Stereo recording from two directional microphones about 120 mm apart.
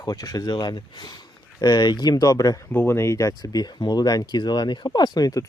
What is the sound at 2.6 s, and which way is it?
Speech, 20° left (ahead or behind).